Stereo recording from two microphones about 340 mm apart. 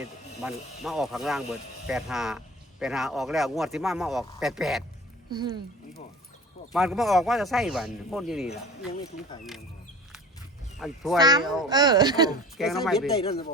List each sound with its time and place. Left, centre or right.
0.4 s speech: centre
5.3 s speech: centre
6.7 s speech: centre
8.9 s speech: centre
10.8 s speech: centre
11.2 s speech: centre
12.5 s speech: centre